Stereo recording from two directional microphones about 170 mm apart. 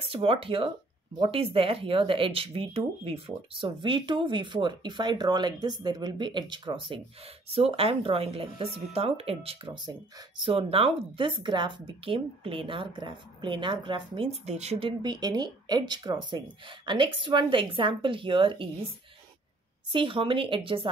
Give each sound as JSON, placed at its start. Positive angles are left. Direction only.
{"t": 0.0, "sound": "speech", "side_deg": -30}
{"t": 19.9, "sound": "speech", "side_deg": -30}